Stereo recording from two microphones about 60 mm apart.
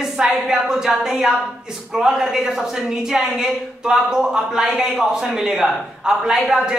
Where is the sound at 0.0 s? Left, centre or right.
Centre.